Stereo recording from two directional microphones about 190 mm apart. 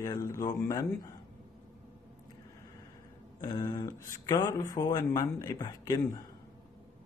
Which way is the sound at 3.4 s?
20° left (ahead or behind).